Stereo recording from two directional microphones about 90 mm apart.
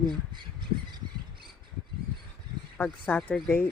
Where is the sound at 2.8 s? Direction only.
20° left (ahead or behind).